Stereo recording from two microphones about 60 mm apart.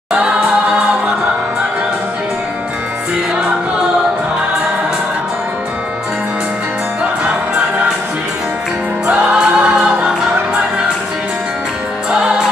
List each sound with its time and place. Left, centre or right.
0.1 s choir: centre
9.0 s music: centre